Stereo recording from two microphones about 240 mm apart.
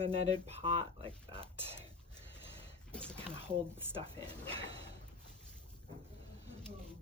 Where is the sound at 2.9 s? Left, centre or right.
Centre.